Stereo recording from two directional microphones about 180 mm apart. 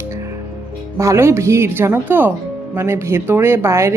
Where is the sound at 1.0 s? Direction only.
15° right (ahead or behind).